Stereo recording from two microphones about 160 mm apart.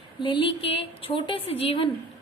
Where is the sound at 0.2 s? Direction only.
30° left (ahead or behind).